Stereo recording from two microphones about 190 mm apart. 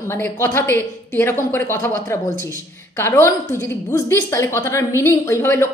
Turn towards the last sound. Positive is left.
turn(degrees=15)  # may be behind; listen again after turning